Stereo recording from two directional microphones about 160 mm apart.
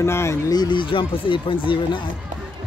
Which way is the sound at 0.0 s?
15° left (ahead or behind).